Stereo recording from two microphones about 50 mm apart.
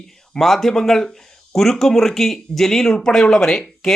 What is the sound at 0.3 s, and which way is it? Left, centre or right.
Speech, centre.